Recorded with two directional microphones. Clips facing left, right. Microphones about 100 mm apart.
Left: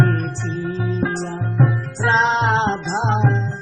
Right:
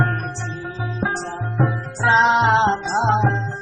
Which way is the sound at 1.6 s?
20° right (ahead or behind).